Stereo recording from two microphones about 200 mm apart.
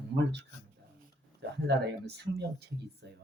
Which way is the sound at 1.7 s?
55° right (ahead or behind).